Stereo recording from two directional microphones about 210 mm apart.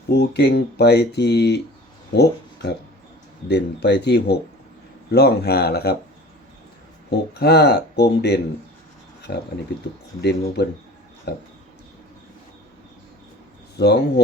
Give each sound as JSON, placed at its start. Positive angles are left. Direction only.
{"t": 0.1, "sound": "speech", "side_deg": 50}
{"t": 7.1, "sound": "speech", "side_deg": 50}
{"t": 9.3, "sound": "speech", "side_deg": 40}
{"t": 13.7, "sound": "speech", "side_deg": 50}